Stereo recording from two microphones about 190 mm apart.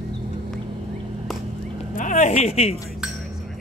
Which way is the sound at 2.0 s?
40° left (ahead or behind).